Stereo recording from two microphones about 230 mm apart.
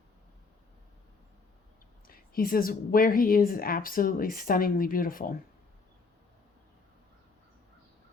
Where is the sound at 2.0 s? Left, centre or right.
Left.